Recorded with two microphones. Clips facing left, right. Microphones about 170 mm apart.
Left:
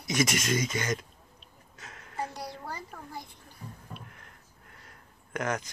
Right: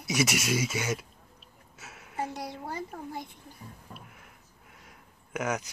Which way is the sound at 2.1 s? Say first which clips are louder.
Right 2 dB; 15° right (ahead or behind).